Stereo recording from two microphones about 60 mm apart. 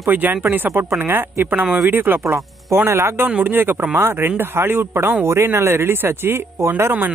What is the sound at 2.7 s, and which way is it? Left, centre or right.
Speech, right.